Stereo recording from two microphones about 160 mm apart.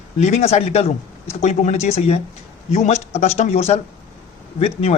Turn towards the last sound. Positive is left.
turn(degrees=40)  # may be behind; listen again after turning